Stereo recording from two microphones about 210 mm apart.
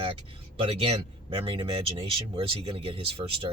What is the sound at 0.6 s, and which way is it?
Speech, 25° right (ahead or behind).